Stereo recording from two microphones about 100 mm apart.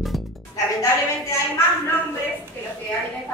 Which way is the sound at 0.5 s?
35° left (ahead or behind).